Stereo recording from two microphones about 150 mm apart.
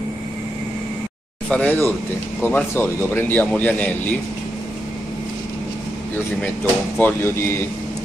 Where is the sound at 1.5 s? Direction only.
10° left (ahead or behind).